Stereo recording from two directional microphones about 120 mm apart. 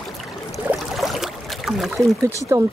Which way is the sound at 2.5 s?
25° right (ahead or behind).